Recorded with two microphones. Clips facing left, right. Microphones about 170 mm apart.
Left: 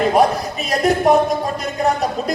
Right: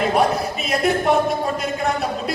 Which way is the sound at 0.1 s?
40° left (ahead or behind).